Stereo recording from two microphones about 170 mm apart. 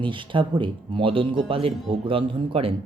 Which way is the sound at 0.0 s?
30° right (ahead or behind).